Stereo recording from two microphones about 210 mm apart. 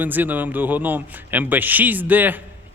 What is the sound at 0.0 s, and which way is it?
A man's voice, 10° right (ahead or behind).